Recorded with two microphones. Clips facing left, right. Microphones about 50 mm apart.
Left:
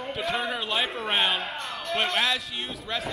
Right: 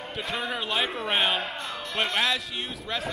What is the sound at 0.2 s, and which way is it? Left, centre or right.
A man's voice, centre.